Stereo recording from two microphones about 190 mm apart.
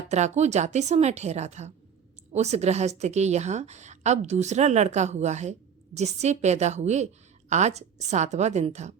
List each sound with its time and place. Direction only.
0.1 s a woman's voice: 35° right (ahead or behind)